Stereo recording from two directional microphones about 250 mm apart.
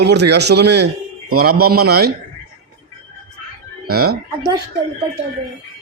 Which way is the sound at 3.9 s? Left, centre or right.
Right.